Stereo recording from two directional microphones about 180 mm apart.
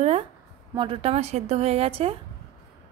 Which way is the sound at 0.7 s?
30° right (ahead or behind).